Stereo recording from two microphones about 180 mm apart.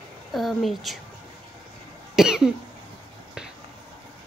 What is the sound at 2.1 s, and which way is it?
Speech, 5° right (ahead or behind).